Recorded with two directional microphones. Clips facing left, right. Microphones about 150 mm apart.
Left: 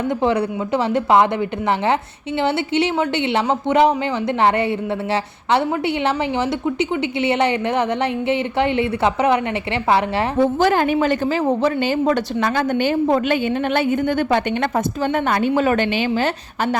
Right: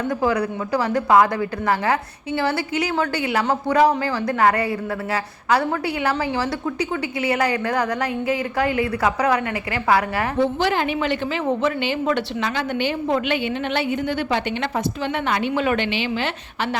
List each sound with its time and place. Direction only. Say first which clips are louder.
0.1 s a woman's voice: left 2 dB; 25° left (ahead or behind)
10.4 s a woman's voice: left 5 dB; 45° left (ahead or behind)